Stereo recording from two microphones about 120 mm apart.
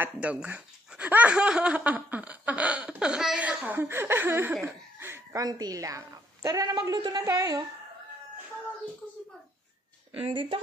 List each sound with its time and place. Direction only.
0.0 s a woman's voice: 10° right (ahead or behind); by 7.6 s 30° right (ahead or behind)
10.1 s speech: 50° right (ahead or behind)